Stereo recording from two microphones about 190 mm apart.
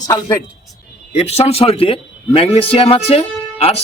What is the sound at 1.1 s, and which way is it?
A man's voice, 35° left (ahead or behind).